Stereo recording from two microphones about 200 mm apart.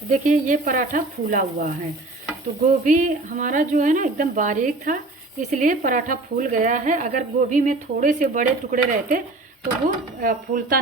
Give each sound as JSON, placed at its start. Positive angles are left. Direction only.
{"t": 0.1, "sound": "speech", "side_deg": -40}
{"t": 2.8, "sound": "speech", "side_deg": -40}